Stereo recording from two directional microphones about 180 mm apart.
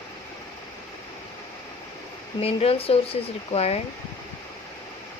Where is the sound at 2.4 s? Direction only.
30° left (ahead or behind).